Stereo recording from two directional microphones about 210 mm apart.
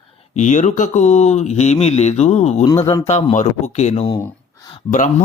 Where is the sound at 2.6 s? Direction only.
15° left (ahead or behind).